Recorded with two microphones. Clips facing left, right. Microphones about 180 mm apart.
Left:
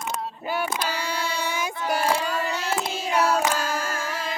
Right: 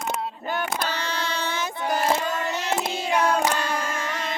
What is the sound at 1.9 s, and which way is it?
Child singing, 10° left (ahead or behind).